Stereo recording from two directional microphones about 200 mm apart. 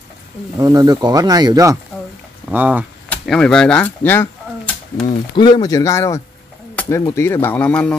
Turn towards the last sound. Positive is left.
turn(degrees=5)  # may be behind; listen again after turning